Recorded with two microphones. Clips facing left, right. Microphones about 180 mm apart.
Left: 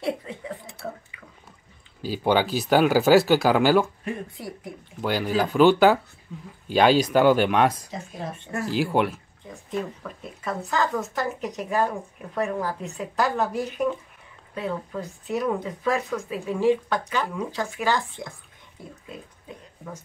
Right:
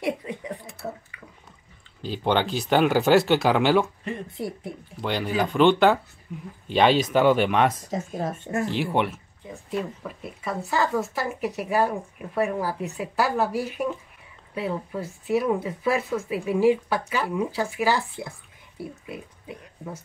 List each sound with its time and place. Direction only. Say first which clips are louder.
0.0 s a sound: right 1 dB; 15° right (ahead or behind)
0.8 s dishes: right 1 dB; 15° right (ahead or behind)
2.0 s speech: left 2 dB; 5° left (ahead or behind)
4.4 s speech: right 4 dB; 25° right (ahead or behind)
5.0 s speech: left 1 dB; 5° left (ahead or behind)
7.9 s speech: right 5 dB; 45° right (ahead or behind)
8.6 s speech: left 4 dB; centre (ahead or behind)
18.8 s a sound: right 5 dB; 10° right (ahead or behind)